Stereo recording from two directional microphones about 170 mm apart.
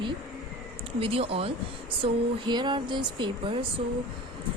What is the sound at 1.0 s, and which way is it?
A woman's voice, 35° right (ahead or behind).